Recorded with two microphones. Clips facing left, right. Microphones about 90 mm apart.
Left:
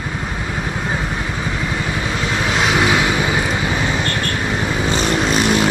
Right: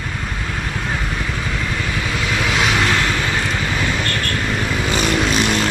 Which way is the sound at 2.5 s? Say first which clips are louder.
Left 3 dB; centre (ahead or behind).